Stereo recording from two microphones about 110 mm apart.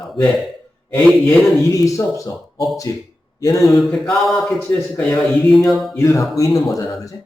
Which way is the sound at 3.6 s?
Centre (ahead or behind).